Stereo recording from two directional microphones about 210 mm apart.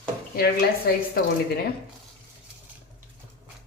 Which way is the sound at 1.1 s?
45° left (ahead or behind).